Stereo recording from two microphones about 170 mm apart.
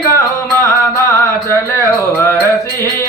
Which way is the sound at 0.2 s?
15° left (ahead or behind).